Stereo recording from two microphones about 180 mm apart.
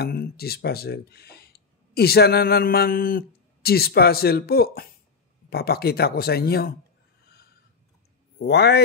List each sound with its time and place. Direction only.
0.0 s speech: 60° left (ahead or behind)
8.4 s speech: 65° left (ahead or behind)